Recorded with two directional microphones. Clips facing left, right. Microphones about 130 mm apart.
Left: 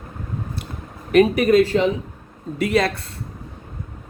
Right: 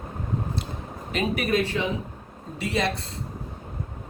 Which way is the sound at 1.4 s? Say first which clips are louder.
Left 9 dB; 40° left (ahead or behind).